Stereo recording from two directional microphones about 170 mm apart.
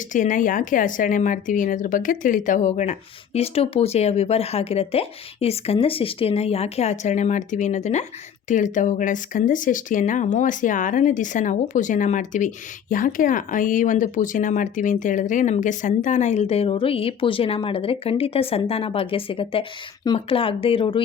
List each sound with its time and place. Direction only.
0.1 s speech: 50° left (ahead or behind); by 21.0 s 30° left (ahead or behind)